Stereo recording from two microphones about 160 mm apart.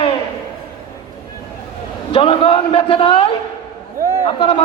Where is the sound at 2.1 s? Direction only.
35° left (ahead or behind).